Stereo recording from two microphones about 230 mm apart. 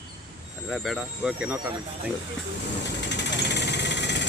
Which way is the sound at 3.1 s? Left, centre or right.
Left.